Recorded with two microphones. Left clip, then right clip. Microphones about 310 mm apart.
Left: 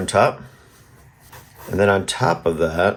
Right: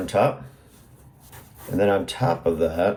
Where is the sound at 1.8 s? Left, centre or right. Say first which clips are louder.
Left 4 dB; left.